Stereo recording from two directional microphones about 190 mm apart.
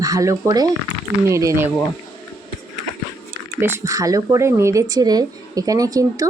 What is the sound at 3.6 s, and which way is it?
Speech, 15° right (ahead or behind).